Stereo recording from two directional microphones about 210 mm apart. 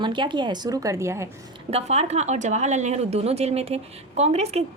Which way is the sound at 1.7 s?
30° right (ahead or behind).